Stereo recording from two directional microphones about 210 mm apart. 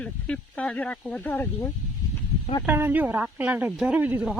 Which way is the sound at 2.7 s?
10° right (ahead or behind).